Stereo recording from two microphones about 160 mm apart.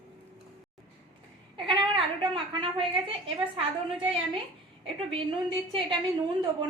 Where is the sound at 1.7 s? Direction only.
30° right (ahead or behind).